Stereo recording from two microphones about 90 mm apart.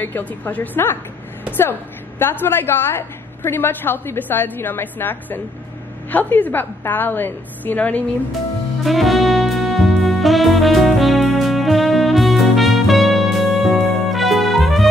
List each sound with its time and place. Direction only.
0.0 s a woman's voice: 20° left (ahead or behind)
8.8 s music: centre (ahead or behind)